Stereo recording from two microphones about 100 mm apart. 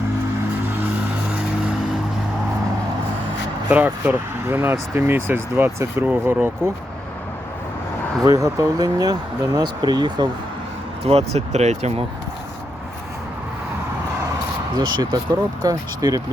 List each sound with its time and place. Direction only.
3.7 s speech: 15° right (ahead or behind)
8.2 s speech: 35° right (ahead or behind)
11.0 s speech: 90° right
14.8 s speech: 45° right (ahead or behind)